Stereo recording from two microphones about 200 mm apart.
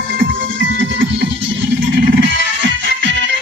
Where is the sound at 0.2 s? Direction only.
70° right (ahead or behind).